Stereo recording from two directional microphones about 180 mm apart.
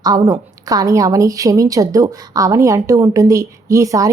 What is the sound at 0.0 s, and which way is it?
A woman's voice, 20° right (ahead or behind).